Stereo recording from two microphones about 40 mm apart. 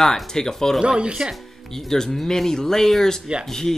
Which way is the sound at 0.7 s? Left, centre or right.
Right.